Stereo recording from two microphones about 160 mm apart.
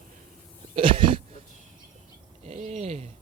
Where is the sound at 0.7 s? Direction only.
30° right (ahead or behind).